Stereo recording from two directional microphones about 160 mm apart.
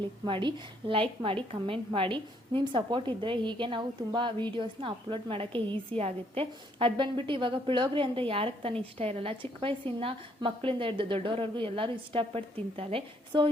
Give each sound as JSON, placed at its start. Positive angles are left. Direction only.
{"t": 0.3, "sound": "a woman's voice", "side_deg": -30}